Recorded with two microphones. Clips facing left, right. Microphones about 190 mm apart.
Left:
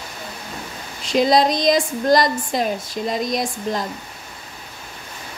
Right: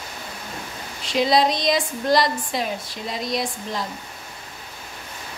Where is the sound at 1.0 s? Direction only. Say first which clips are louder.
Left 3 dB; 45° left (ahead or behind).